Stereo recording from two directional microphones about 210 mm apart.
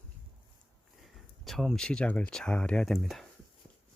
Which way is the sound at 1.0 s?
Centre (ahead or behind).